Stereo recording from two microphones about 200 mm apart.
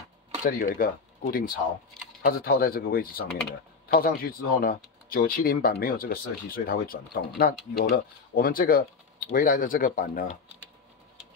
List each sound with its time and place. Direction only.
0.4 s speech: 45° left (ahead or behind)